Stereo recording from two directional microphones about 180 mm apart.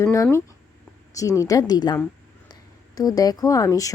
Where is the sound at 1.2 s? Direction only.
20° left (ahead or behind).